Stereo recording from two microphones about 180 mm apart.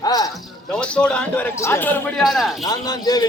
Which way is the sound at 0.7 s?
5° left (ahead or behind).